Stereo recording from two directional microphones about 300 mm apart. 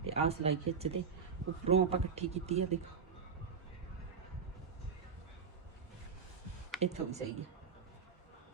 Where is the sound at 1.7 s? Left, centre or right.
Right.